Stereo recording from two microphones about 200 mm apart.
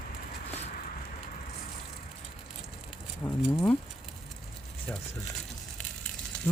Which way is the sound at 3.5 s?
10° left (ahead or behind).